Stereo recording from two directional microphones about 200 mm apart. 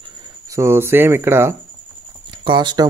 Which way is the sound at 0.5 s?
15° right (ahead or behind).